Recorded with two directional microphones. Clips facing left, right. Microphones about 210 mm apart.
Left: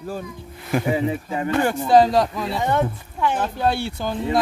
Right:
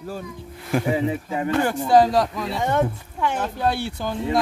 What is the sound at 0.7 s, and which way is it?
Speech, centre (ahead or behind).